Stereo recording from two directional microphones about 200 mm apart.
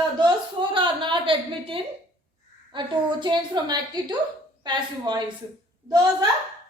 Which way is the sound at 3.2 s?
20° right (ahead or behind).